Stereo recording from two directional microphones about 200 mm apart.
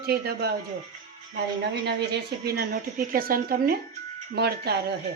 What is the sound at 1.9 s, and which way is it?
A woman's voice, 55° right (ahead or behind).